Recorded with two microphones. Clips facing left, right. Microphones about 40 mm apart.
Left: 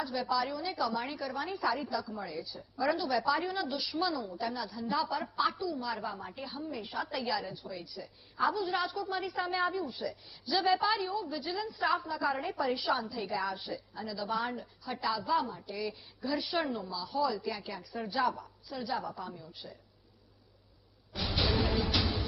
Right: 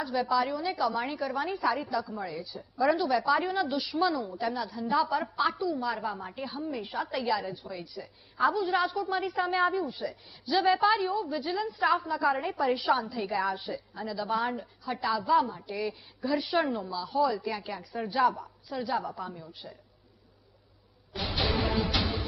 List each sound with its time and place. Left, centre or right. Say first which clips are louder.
0.0 s a woman's voice: right 4 dB; centre
2.7 s a woman's voice: right 5 dB; centre
3.4 s a woman's voice: right 5 dB; centre
5.5 s a woman's voice: right 5 dB; centre
5.7 s a woman's voice: right 5 dB; centre
6.1 s a woman's voice: right 4 dB; centre
12.6 s a woman's voice: right 6 dB; centre
13.4 s a woman's voice: right 5 dB; centre
15.5 s a woman's voice: right 4 dB; right
15.9 s a woman's voice: right 5 dB; centre
17.1 s a woman's voice: right 5 dB; centre
17.3 s a woman's voice: right 4 dB; centre
21.1 s music: right 2 dB; centre